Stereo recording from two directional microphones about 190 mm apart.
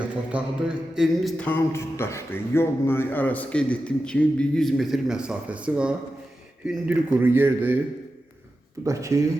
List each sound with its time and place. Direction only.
0.3 s a sound: 5° right (ahead or behind)
6.7 s a man's voice: 10° right (ahead or behind)
8.8 s a man's voice: 15° right (ahead or behind)